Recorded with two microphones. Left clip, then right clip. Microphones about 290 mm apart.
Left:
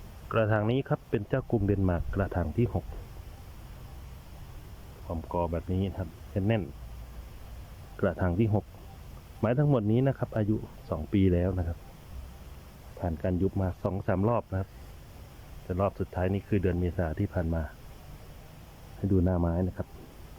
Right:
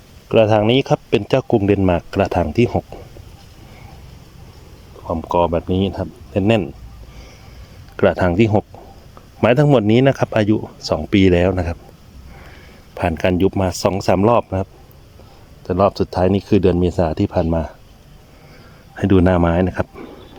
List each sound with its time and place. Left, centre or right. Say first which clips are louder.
0.3 s speech: right 14 dB; centre
5.0 s speech: right 15 dB; right
7.9 s speech: right 15 dB; right
13.0 s speech: right 15 dB; right; by 17.7 s centre
19.0 s speech: right 15 dB; right